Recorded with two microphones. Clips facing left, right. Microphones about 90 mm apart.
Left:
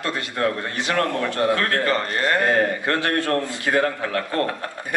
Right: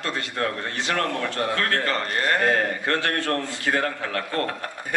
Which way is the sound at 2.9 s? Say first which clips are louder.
Left 1 dB; 15° left (ahead or behind).